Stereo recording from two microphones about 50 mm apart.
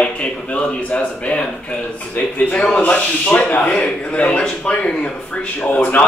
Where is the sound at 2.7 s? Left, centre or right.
Left.